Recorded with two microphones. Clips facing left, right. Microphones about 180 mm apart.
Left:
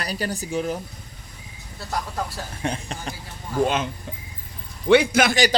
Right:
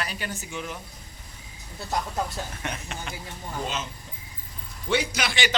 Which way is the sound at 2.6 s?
35° left (ahead or behind).